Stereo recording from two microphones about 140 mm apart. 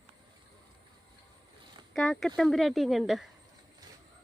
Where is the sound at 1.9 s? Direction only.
Centre (ahead or behind).